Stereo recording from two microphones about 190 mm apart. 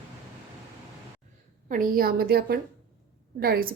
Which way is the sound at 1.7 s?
50° right (ahead or behind).